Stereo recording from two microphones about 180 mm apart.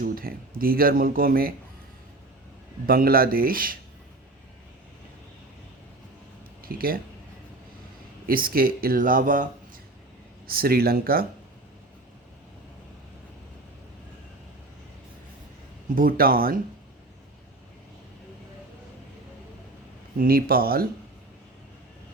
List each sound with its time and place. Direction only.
0.0 s speech: 55° right (ahead or behind)
2.8 s speech: 55° right (ahead or behind)
6.7 s speech: 55° right (ahead or behind)
8.3 s speech: 55° right (ahead or behind)
16.0 s speech: 55° right (ahead or behind)
20.1 s speech: 55° right (ahead or behind)